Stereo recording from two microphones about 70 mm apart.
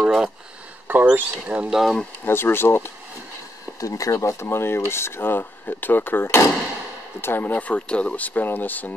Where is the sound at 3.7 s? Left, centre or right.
Left.